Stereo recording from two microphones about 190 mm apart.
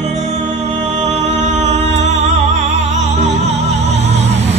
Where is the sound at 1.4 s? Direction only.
40° right (ahead or behind).